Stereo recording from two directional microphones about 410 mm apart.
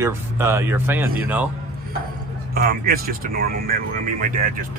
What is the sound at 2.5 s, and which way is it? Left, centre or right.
Speech, right.